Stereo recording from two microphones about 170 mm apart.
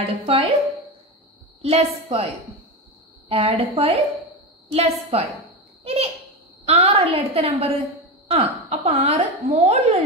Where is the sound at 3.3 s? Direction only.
35° right (ahead or behind).